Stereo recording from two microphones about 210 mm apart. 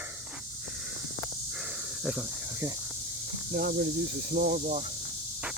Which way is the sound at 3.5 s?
45° right (ahead or behind).